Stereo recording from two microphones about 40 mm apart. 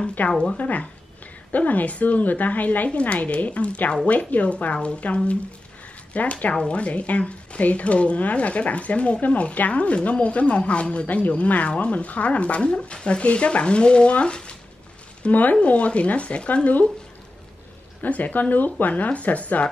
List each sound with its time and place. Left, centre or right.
0.2 s speech: left
15.2 s speech: left
15.6 s speech: left
18.0 s speech: left